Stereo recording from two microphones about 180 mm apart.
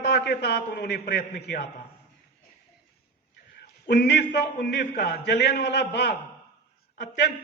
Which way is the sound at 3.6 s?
70° left (ahead or behind).